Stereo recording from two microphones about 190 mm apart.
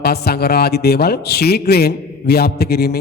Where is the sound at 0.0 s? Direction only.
55° left (ahead or behind).